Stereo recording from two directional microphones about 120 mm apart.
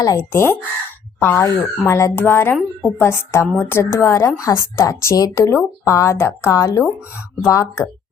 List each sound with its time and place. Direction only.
0.0 s speech: 30° left (ahead or behind)
0.3 s speech: 15° left (ahead or behind)